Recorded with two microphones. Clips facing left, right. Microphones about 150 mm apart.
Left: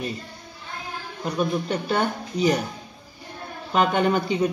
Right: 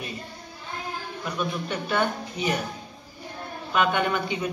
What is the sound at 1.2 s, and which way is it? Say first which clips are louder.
Speech: left 6 dB; 40° left (ahead or behind).